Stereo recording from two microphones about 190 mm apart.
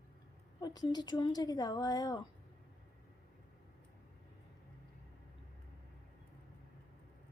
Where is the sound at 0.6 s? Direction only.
20° left (ahead or behind).